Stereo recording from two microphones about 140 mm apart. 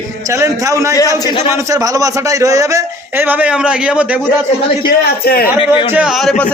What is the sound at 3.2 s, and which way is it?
Speech, 10° right (ahead or behind).